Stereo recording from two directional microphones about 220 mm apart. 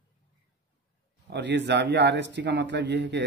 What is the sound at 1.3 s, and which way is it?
A man's voice, 50° right (ahead or behind).